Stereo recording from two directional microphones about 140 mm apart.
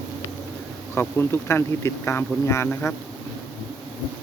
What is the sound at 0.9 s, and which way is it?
Speech, 15° left (ahead or behind).